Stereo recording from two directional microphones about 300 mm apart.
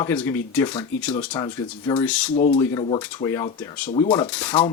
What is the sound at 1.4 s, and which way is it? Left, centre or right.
Speech, centre.